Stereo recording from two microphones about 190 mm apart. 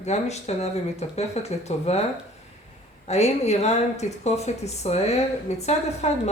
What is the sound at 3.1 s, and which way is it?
Speech, 35° left (ahead or behind).